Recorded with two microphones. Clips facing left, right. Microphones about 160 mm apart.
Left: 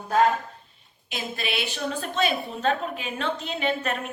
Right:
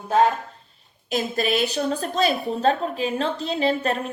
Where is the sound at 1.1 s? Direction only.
40° right (ahead or behind).